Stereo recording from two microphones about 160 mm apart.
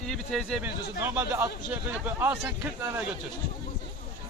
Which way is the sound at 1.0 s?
15° right (ahead or behind).